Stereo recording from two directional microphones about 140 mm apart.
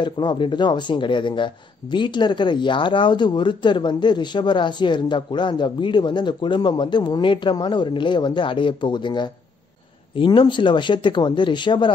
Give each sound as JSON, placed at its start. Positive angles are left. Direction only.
{"t": 0.0, "sound": "speech", "side_deg": 35}